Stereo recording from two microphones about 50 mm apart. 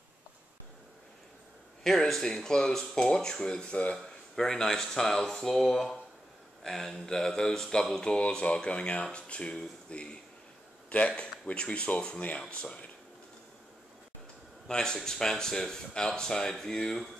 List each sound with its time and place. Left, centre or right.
1.8 s speech: centre
3.9 s speech: centre
14.7 s speech: centre